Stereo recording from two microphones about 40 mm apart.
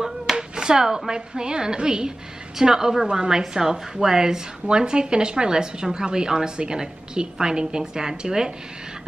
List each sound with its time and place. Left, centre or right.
0.4 s a woman's voice: centre